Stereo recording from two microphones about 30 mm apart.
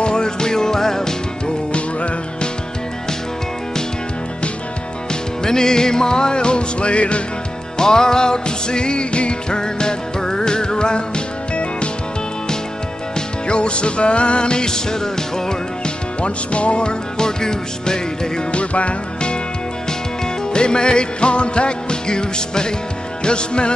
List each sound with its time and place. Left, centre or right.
0.0 s music: left
1.7 s music: left
5.4 s music: left
7.7 s music: left
13.5 s music: left
16.2 s music: left
17.2 s music: left
18.5 s music: left
20.5 s music: left